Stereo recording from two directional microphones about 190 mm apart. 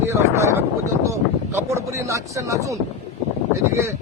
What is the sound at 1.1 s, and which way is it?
Speech, 15° right (ahead or behind).